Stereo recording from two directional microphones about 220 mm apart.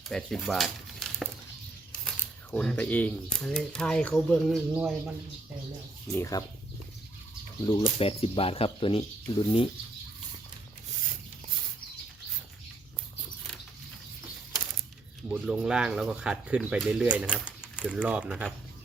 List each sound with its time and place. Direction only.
0.1 s speech: centre (ahead or behind)
6.3 s speech: 15° left (ahead or behind)
7.6 s speech: 20° left (ahead or behind)
15.3 s speech: 5° right (ahead or behind)